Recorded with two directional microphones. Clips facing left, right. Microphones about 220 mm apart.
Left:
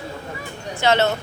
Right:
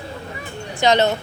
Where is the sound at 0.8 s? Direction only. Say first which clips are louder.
Right 2 dB; 15° right (ahead or behind).